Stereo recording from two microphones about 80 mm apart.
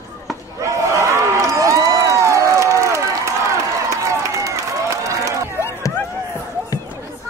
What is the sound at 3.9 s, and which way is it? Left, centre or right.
Run, right.